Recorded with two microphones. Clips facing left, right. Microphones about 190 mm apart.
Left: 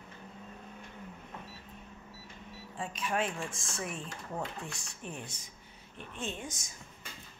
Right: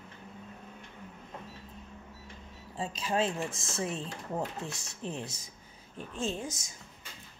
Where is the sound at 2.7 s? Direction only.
30° right (ahead or behind).